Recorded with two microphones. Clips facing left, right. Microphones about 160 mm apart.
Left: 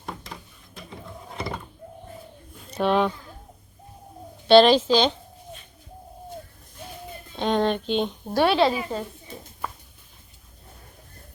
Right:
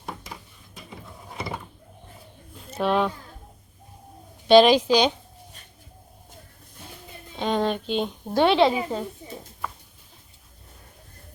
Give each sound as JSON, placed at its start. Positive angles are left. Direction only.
{"t": 0.0, "sound": "a sound", "side_deg": -5}
{"t": 1.4, "sound": "door", "side_deg": -10}
{"t": 2.6, "sound": "speech", "side_deg": -5}
{"t": 4.4, "sound": "a woman's voice", "side_deg": -10}
{"t": 7.3, "sound": "speech", "side_deg": -5}
{"t": 8.3, "sound": "a woman's voice", "side_deg": -20}